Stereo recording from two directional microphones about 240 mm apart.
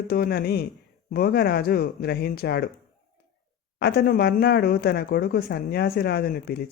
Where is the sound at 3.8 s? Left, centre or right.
Left.